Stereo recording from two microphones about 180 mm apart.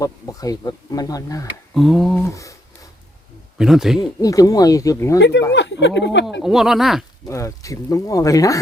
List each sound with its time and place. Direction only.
0.0 s speech: 20° left (ahead or behind)
1.7 s speech: centre (ahead or behind)
2.2 s speech: 15° left (ahead or behind)
3.6 s speech: centre (ahead or behind)
4.0 s speech: 20° left (ahead or behind)
5.5 s speech: 80° left
6.4 s speech: centre (ahead or behind)
7.3 s speech: 15° left (ahead or behind)